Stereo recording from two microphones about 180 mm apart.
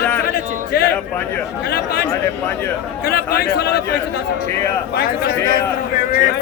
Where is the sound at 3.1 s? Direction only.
60° left (ahead or behind).